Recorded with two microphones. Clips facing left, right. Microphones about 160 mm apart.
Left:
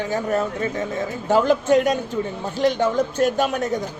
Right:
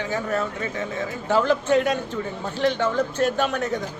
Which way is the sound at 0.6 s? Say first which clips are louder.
Left 4 dB; 40° left (ahead or behind).